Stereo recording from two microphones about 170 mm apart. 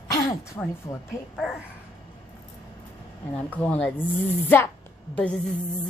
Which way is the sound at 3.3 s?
10° left (ahead or behind).